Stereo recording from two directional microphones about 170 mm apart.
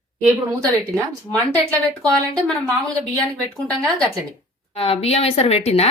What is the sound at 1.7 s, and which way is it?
Speech, 5° left (ahead or behind).